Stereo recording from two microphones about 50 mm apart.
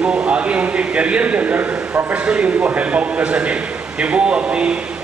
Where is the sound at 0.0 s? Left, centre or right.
Right.